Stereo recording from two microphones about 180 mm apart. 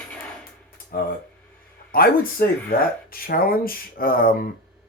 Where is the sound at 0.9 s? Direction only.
55° left (ahead or behind).